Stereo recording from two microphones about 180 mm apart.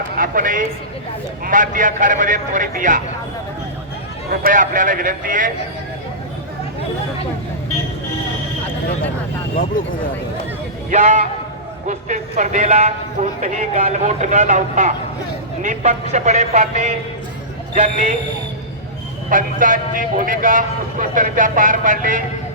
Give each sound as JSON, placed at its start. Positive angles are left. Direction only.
{"t": 0.2, "sound": "speech", "side_deg": -50}
{"t": 4.3, "sound": "speech", "side_deg": -50}
{"t": 10.9, "sound": "speech", "side_deg": -40}
{"t": 19.3, "sound": "speech", "side_deg": -50}